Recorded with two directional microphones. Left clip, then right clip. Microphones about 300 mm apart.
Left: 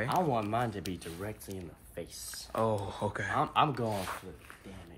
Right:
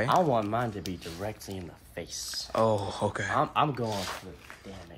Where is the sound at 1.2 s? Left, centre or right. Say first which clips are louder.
Right 4 dB; centre.